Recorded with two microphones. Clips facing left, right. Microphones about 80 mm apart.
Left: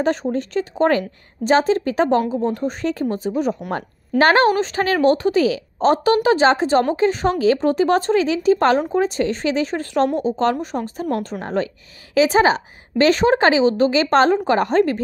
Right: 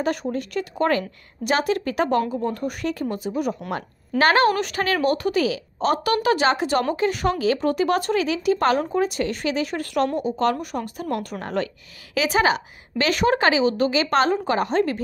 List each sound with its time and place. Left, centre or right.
0.0 s a woman's voice: left